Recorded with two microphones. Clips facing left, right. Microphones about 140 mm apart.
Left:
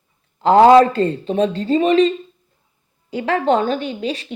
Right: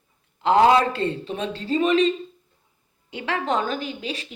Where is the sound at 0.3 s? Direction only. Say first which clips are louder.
Left 7 dB; 40° left (ahead or behind).